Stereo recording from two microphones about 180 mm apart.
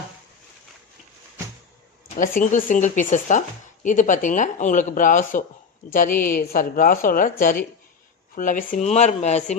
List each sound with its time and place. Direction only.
2.1 s a woman's voice: 50° left (ahead or behind)